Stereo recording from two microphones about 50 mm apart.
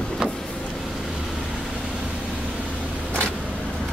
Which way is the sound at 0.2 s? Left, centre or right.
Centre.